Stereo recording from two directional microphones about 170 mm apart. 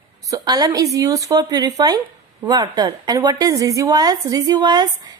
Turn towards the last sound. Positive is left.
turn(degrees=-25)  # may be behind; listen again after turning